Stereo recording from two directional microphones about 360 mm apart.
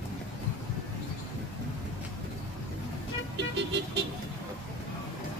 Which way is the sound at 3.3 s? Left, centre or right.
Right.